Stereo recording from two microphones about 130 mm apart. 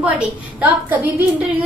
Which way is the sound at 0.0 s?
10° right (ahead or behind).